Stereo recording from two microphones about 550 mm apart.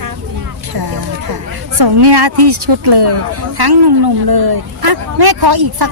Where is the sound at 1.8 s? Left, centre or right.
Right.